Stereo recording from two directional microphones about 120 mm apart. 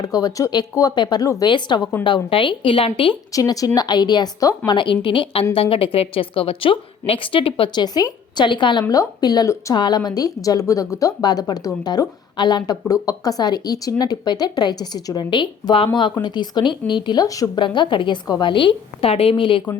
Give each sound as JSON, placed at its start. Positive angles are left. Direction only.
{"t": 0.0, "sound": "a woman's voice", "side_deg": 30}
{"t": 3.3, "sound": "a woman's voice", "side_deg": 30}
{"t": 7.9, "sound": "a woman's voice", "side_deg": 35}